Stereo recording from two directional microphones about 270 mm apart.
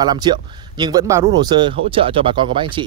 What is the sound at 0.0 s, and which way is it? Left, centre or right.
Speech, centre.